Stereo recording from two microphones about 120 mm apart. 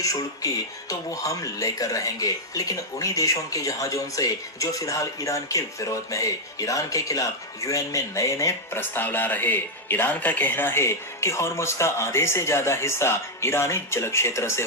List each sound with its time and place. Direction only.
0.9 s speech: 25° left (ahead or behind)